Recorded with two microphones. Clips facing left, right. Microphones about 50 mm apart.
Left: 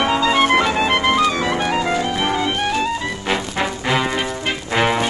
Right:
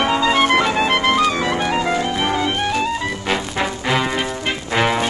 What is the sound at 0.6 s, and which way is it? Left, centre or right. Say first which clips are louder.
Music: even; centre.